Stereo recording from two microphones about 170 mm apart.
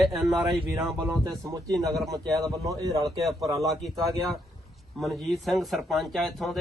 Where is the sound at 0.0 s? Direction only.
Centre (ahead or behind).